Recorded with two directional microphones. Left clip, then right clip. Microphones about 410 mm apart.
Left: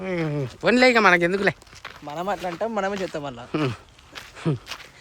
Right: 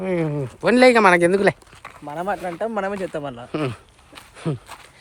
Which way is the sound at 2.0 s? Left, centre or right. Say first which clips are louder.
Right 2 dB; centre.